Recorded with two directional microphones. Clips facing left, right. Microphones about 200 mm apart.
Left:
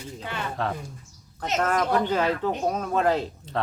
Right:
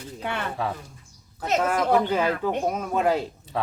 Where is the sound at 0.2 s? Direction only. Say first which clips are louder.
Right 5 dB; 60° right (ahead or behind).